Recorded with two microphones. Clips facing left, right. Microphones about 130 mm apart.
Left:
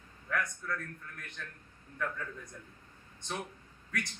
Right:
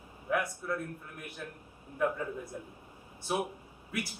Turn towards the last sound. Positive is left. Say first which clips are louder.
# right 2 dB
turn(degrees=-10)  # may be behind; listen again after turning